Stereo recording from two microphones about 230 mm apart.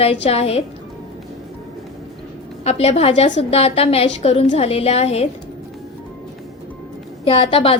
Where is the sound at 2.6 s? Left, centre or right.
Left.